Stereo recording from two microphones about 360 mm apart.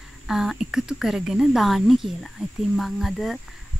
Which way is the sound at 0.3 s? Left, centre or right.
Centre.